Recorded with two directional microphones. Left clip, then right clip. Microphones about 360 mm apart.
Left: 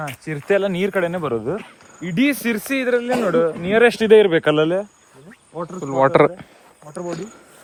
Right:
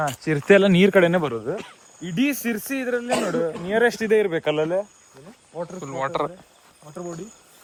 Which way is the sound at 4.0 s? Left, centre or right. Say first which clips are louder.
Left 8 dB; centre.